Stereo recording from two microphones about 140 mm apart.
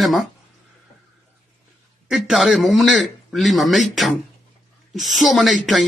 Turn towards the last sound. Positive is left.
turn(degrees=0)  # may be behind; listen again after turning